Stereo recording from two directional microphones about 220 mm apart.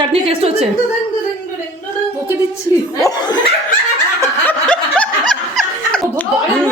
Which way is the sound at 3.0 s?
20° left (ahead or behind).